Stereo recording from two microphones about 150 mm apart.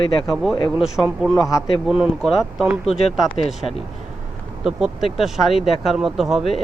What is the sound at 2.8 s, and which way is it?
Speech, 40° left (ahead or behind).